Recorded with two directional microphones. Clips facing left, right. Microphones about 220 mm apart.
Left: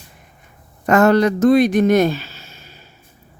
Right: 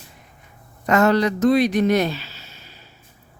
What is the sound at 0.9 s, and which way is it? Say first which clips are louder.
Speech: left 4 dB; 50° left (ahead or behind).